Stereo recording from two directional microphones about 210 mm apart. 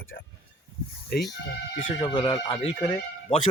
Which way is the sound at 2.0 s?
25° left (ahead or behind).